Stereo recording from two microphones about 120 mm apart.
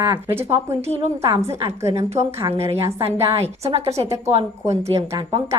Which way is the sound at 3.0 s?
55° right (ahead or behind).